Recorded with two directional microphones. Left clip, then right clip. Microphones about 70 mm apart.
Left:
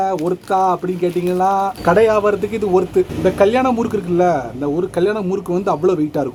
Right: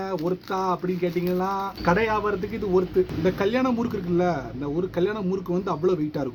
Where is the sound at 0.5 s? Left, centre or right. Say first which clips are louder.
Left 12 dB; left.